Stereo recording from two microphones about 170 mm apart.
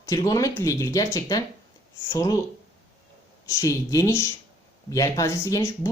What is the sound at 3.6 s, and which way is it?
Speech, 20° left (ahead or behind).